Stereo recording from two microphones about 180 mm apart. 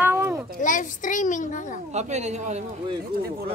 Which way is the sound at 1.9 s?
40° right (ahead or behind).